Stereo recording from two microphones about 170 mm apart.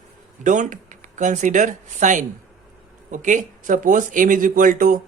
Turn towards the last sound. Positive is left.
turn(degrees=-55)  # may be behind; listen again after turning